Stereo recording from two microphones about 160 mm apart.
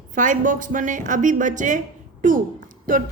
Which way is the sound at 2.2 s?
55° right (ahead or behind).